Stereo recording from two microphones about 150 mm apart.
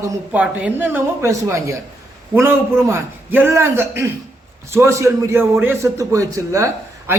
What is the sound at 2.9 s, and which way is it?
A man's voice, 15° right (ahead or behind).